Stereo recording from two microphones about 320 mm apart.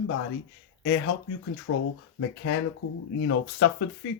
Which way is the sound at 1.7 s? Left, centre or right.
Left.